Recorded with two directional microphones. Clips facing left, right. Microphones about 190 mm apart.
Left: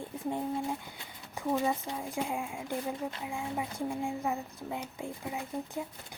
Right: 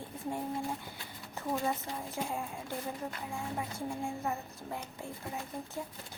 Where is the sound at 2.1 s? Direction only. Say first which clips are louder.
Left 3 dB; 15° left (ahead or behind).